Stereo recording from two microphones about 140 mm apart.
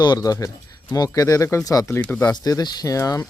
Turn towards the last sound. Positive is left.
turn(degrees=25)  # may be behind; listen again after turning